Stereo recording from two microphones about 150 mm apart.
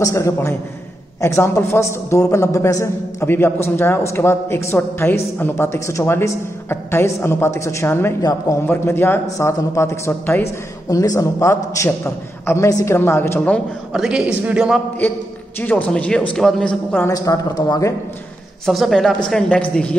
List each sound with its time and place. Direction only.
0.0 s a man's voice: 20° left (ahead or behind)
13.9 s a woman's voice: 5° right (ahead or behind)
15.6 s a man's voice: 10° left (ahead or behind)
17.1 s a man's voice: 25° left (ahead or behind)
18.7 s a woman's voice: centre (ahead or behind)